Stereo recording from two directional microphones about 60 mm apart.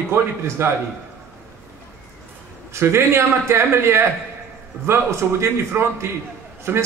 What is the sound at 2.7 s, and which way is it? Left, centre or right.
A man's voice, right.